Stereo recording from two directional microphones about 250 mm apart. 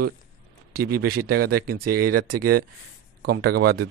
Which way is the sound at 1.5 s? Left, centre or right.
Right.